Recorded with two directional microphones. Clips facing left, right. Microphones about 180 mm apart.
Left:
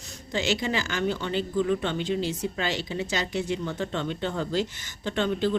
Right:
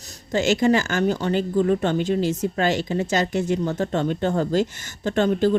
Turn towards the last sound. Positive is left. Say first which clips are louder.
# right 6 dB
turn(degrees=-45)  # may be behind; listen again after turning